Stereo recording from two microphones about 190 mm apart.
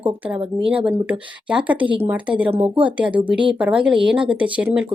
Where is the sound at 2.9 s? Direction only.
5° right (ahead or behind).